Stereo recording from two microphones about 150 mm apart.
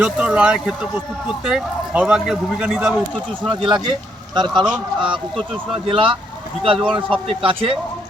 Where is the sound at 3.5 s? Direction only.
30° right (ahead or behind).